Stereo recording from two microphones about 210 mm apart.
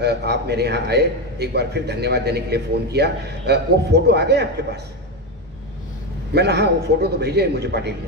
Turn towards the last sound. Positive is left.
turn(degrees=-50)  # may be behind; listen again after turning